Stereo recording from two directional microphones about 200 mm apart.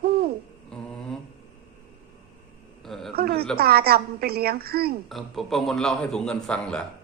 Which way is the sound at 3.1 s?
50° right (ahead or behind).